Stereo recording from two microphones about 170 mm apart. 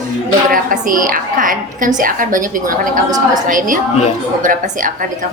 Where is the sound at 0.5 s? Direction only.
55° right (ahead or behind).